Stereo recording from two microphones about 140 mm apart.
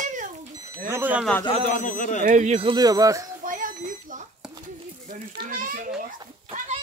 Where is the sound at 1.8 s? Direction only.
70° left (ahead or behind).